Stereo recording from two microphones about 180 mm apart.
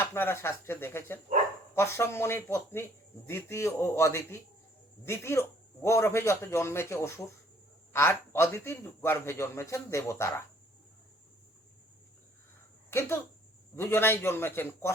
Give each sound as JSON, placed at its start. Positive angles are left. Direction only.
{"t": 0.0, "sound": "a man's voice", "side_deg": 15}
{"t": 12.9, "sound": "a man's voice", "side_deg": 15}